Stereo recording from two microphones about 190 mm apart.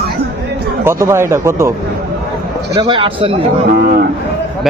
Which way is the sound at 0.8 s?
15° right (ahead or behind).